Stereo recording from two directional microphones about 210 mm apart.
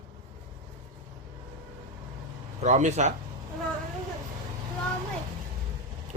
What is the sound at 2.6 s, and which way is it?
Speech, 35° right (ahead or behind).